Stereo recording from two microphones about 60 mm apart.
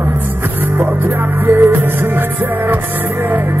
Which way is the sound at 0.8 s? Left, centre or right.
Right.